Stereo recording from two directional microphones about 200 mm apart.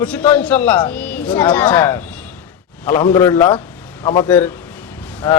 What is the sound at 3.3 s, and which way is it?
Speech, 25° left (ahead or behind).